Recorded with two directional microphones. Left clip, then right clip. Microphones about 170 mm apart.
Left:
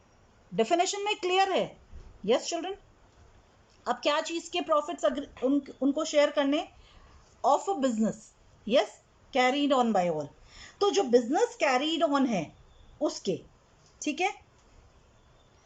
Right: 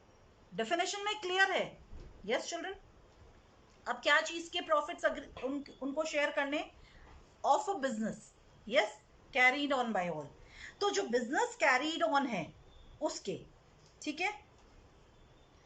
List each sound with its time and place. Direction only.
0.5 s a woman's voice: 20° left (ahead or behind)
3.8 s a woman's voice: 25° left (ahead or behind)